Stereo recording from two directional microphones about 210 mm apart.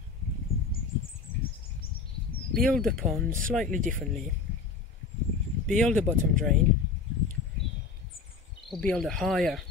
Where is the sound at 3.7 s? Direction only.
40° right (ahead or behind).